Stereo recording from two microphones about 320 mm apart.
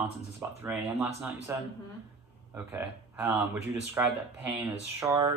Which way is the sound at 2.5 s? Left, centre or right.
Centre.